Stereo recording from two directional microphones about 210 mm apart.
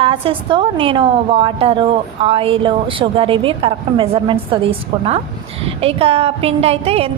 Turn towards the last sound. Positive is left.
turn(degrees=-30)  # may be behind; listen again after turning